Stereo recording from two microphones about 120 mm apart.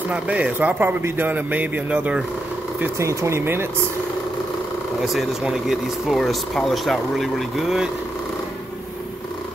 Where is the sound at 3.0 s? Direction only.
25° right (ahead or behind).